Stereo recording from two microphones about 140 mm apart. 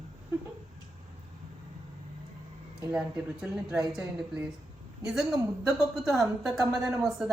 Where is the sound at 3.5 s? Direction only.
5° right (ahead or behind).